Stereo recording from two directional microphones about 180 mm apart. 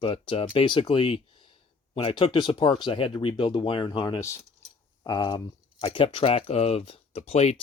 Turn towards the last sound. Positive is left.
turn(degrees=35)  # may be behind; listen again after turning